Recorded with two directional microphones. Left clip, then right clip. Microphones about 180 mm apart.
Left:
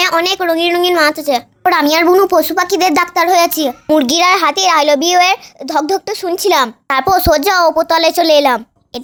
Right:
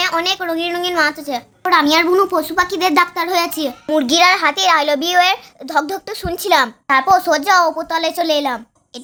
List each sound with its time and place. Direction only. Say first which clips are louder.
0.0 s a child's voice: left 5 dB; 35° left (ahead or behind)
6.8 s a child's voice: left 1 dB; 50° left (ahead or behind)